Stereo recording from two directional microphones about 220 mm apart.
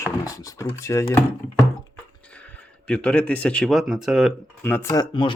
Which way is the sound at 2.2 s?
5° left (ahead or behind).